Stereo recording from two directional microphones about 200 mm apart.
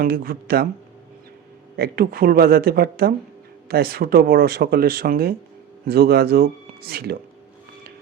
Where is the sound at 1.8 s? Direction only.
50° right (ahead or behind).